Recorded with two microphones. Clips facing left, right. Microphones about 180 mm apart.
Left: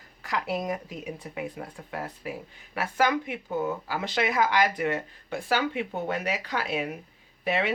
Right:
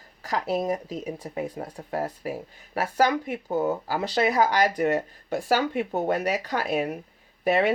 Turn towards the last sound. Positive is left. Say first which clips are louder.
# right 5 dB
turn(degrees=-45)  # may be behind; listen again after turning